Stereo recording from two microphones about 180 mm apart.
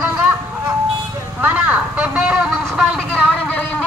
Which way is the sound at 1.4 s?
10° right (ahead or behind).